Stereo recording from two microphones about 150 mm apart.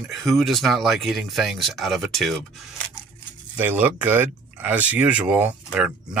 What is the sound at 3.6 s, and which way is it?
Speech, 10° right (ahead or behind).